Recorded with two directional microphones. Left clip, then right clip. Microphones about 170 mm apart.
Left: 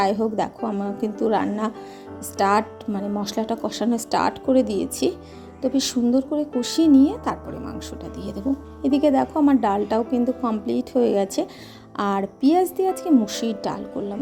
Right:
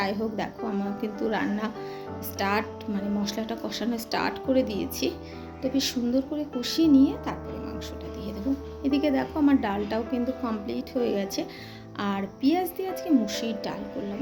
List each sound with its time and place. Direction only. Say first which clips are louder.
0.0 s a woman's voice: left 8 dB; 45° left (ahead or behind)
8.8 s a woman's voice: left 7 dB; 45° left (ahead or behind)